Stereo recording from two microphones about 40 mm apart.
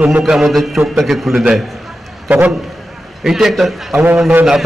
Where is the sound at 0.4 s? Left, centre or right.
Centre.